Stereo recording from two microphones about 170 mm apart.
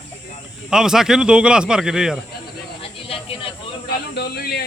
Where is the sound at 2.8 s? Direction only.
35° left (ahead or behind).